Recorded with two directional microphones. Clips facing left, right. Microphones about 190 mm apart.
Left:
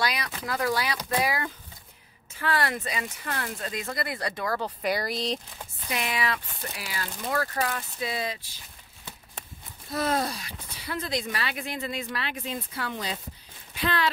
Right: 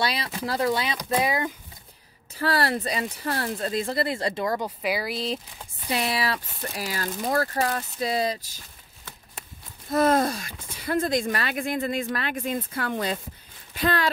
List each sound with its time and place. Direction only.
0.0 s speech: 30° right (ahead or behind)
2.3 s speech: 35° right (ahead or behind)
4.6 s speech: 5° right (ahead or behind)
5.9 s speech: 35° right (ahead or behind)
9.9 s speech: 50° right (ahead or behind)